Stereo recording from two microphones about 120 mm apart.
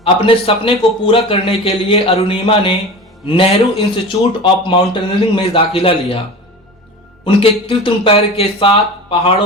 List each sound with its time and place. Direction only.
0.0 s speech: 50° left (ahead or behind)
7.3 s speech: 50° left (ahead or behind)